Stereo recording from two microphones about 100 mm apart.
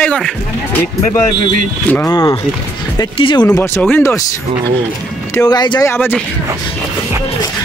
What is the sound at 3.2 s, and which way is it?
Speech, 55° left (ahead or behind).